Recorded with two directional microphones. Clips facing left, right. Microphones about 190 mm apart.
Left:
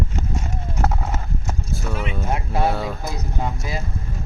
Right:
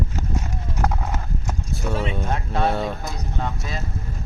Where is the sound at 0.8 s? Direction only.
5° left (ahead or behind).